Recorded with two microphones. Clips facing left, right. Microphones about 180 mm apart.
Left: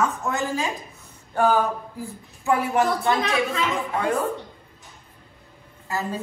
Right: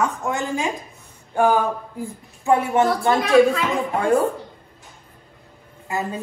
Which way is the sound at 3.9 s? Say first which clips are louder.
Right 6 dB; 30° right (ahead or behind).